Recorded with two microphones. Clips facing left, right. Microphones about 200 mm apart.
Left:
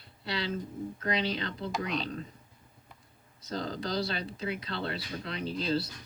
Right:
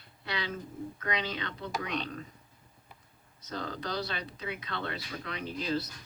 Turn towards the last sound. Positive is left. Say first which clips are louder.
# left 2 dB
turn(degrees=30)  # may be behind; listen again after turning